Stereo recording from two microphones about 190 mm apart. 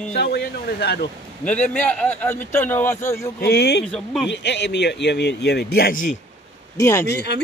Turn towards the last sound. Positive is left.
turn(degrees=15)  # may be behind; listen again after turning